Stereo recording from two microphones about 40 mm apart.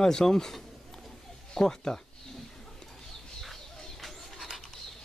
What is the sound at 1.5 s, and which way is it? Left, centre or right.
Speech, centre.